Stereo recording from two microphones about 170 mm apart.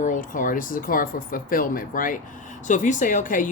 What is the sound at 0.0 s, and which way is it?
Speech, 50° left (ahead or behind).